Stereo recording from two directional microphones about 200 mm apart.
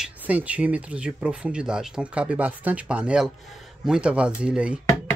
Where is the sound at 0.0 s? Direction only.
5° right (ahead or behind).